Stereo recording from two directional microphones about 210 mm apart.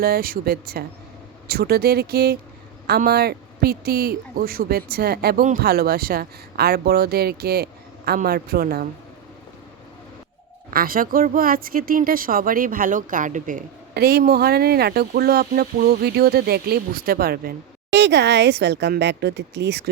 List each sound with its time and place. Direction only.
0.0 s speech: 45° right (ahead or behind)
10.7 s a woman's voice: 45° right (ahead or behind)